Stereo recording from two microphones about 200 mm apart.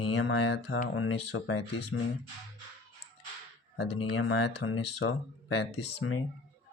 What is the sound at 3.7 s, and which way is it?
Speech, 60° left (ahead or behind).